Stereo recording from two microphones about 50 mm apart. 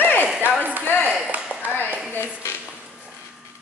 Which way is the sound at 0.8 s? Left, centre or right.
Left.